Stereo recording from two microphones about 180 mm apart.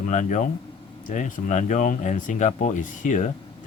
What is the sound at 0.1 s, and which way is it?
Speech, 40° left (ahead or behind).